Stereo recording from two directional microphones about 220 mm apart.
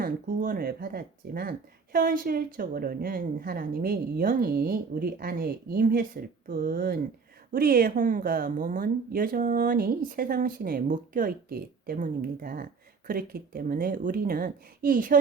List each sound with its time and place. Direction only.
0.0 s speech: 40° right (ahead or behind)